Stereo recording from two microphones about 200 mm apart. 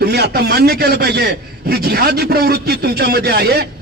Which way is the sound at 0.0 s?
55° right (ahead or behind).